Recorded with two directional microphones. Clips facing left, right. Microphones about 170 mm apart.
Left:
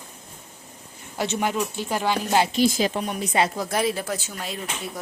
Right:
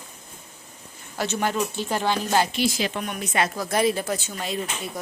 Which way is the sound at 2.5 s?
40° left (ahead or behind).